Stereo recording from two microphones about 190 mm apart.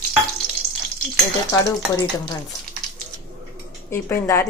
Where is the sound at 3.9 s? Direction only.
15° left (ahead or behind).